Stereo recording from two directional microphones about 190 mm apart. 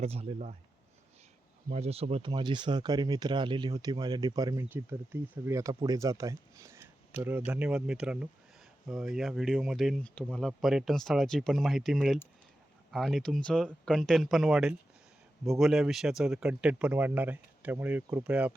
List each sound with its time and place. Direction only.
0.0 s speech: 35° right (ahead or behind)
1.7 s speech: 35° right (ahead or behind); by 18.5 s 5° right (ahead or behind)